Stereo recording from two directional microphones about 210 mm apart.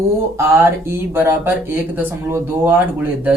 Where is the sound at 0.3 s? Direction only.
10° right (ahead or behind).